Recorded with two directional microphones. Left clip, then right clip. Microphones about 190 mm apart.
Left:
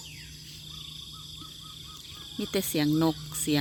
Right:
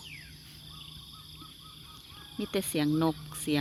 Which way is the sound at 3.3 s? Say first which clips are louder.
Left 3 dB; 5° left (ahead or behind).